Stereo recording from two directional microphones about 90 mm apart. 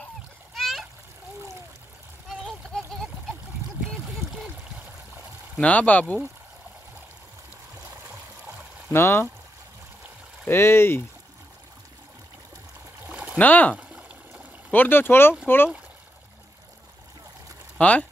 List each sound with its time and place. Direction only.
0.6 s splash: centre (ahead or behind)
2.2 s a sound: centre (ahead or behind)
2.9 s splash: centre (ahead or behind)
3.8 s a sound: centre (ahead or behind)
5.6 s speech: 15° left (ahead or behind)
8.9 s speech: 30° left (ahead or behind)
10.5 s speech: 30° left (ahead or behind)
13.1 s a sound: 15° right (ahead or behind)
13.4 s speech: 20° left (ahead or behind)
17.7 s speech: 15° left (ahead or behind)